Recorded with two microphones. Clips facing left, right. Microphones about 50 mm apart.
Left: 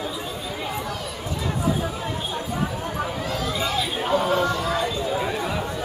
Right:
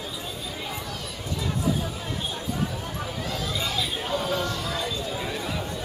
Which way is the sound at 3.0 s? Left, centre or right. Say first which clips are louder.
Left 5 dB; centre.